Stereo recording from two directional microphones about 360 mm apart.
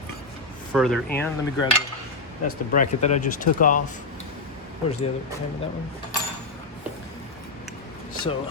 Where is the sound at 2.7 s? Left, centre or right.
Centre.